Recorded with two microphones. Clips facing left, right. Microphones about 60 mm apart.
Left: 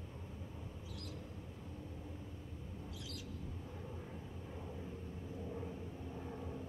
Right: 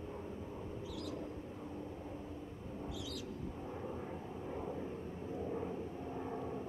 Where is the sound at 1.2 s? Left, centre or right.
Right.